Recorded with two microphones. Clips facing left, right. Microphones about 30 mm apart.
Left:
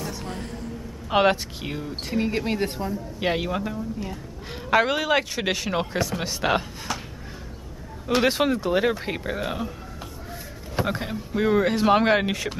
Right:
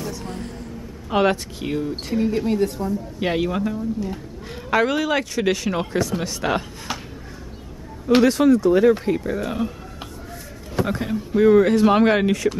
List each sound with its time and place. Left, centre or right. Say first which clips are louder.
0.0 s speech: right 2 dB; centre
1.6 s a man's voice: right 6 dB; centre
2.1 s speech: right 4 dB; left
2.9 s a man's voice: right 2 dB; centre
6.9 s a sound: right 1 dB; centre
8.2 s speech: right 6 dB; left
10.8 s speech: right 4 dB; centre